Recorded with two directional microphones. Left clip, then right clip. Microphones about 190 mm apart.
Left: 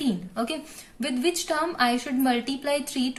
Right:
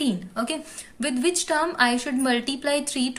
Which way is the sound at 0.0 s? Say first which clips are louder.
Right 2 dB; 25° right (ahead or behind).